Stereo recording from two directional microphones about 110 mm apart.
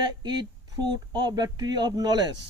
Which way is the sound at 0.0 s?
40° right (ahead or behind).